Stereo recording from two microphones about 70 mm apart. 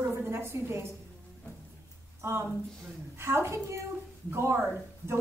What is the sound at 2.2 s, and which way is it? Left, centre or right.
A woman's voice, right.